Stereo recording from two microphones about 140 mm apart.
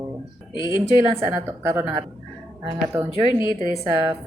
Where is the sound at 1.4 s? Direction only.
20° right (ahead or behind).